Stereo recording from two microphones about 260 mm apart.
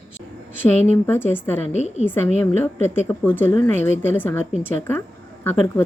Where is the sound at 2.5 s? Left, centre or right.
Centre.